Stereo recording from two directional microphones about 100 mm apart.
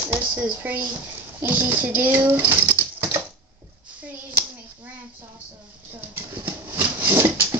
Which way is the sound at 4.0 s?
20° right (ahead or behind).